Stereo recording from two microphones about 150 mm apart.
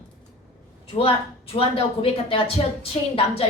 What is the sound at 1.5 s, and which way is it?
A woman's voice, 40° left (ahead or behind).